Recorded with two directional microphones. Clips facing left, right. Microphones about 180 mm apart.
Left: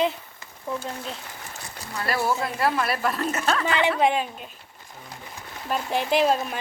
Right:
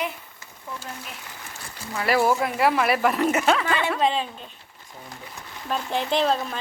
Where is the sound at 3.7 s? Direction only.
15° left (ahead or behind).